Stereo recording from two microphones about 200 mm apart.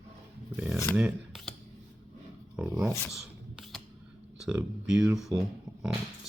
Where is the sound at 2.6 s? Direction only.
5° right (ahead or behind).